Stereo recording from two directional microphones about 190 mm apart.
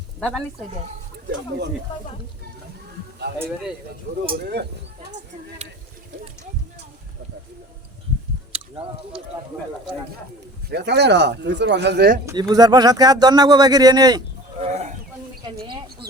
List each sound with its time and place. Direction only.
0.2 s speech: 5° left (ahead or behind)
3.3 s speech: 60° right (ahead or behind)
4.4 s speech: 60° right (ahead or behind)
8.5 s speech: 30° right (ahead or behind)
10.7 s speech: 60° right (ahead or behind)
12.2 s speech: 20° right (ahead or behind)
14.6 s wild animals: 35° right (ahead or behind)
15.6 s a sound: 25° right (ahead or behind)